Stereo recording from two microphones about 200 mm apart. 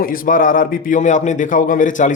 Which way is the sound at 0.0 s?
45° left (ahead or behind).